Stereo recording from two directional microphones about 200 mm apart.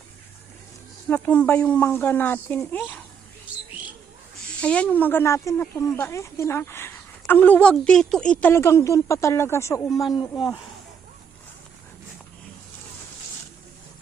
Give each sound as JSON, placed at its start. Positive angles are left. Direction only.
{"t": 1.0, "sound": "a woman's voice", "side_deg": 10}
{"t": 4.6, "sound": "a woman's voice", "side_deg": 5}